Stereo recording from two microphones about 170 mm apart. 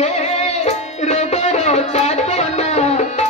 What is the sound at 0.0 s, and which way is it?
Music, 40° left (ahead or behind).